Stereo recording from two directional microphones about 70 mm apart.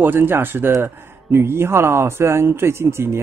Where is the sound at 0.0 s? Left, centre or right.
Right.